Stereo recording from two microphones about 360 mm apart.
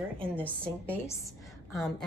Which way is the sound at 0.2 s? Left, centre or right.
Centre.